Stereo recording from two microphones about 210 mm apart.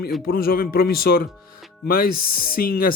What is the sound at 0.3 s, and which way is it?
Speech, 45° left (ahead or behind).